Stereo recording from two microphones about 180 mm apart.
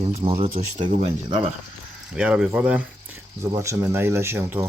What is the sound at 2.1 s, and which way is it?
Speech, 5° right (ahead or behind).